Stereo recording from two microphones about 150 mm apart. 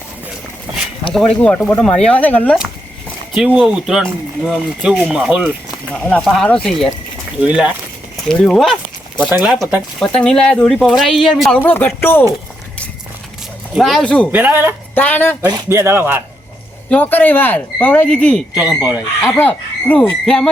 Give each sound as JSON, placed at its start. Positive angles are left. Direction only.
{"t": 1.4, "sound": "speech", "side_deg": 10}
{"t": 3.3, "sound": "speech", "side_deg": -5}
{"t": 5.9, "sound": "speech", "side_deg": 10}
{"t": 10.0, "sound": "speech", "side_deg": 5}
{"t": 11.6, "sound": "speech", "side_deg": 15}
{"t": 13.7, "sound": "speech", "side_deg": 0}
{"t": 14.3, "sound": "speech", "side_deg": -10}
{"t": 14.9, "sound": "speech", "side_deg": 10}
{"t": 15.4, "sound": "speech", "side_deg": -25}
{"t": 16.9, "sound": "speech", "side_deg": 10}
{"t": 18.7, "sound": "speech", "side_deg": -10}
{"t": 19.2, "sound": "speech", "side_deg": 10}